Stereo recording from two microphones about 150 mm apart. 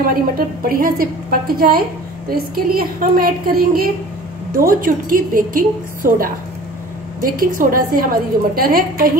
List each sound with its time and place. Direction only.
0.7 s a woman's voice: 75° right (ahead or behind)